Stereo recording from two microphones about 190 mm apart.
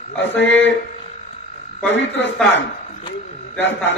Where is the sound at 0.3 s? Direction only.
70° left (ahead or behind).